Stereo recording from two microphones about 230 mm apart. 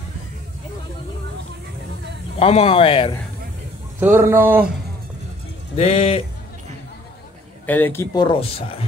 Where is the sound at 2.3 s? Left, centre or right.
Left.